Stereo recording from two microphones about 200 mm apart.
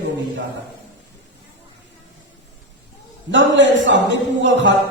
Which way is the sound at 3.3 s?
65° right (ahead or behind).